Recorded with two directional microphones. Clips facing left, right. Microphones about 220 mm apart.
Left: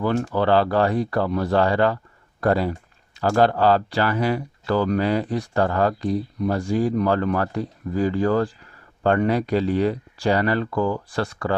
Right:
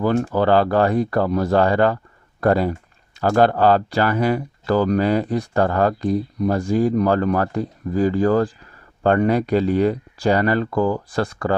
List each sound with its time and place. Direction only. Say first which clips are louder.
0.0 s speech: right 3 dB; 40° right (ahead or behind)